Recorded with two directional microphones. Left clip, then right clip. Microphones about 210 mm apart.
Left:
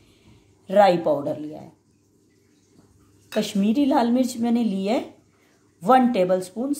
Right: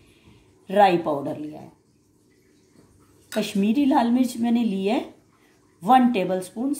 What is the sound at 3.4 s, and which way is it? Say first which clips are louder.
A woman's voice: left 1 dB; 25° left (ahead or behind).